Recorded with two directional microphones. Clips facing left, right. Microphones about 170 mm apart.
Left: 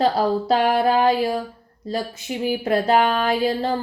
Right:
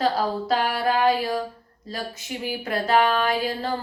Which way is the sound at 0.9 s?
30° left (ahead or behind).